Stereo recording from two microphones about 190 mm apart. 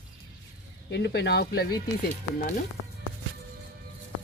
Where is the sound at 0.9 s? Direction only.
65° left (ahead or behind).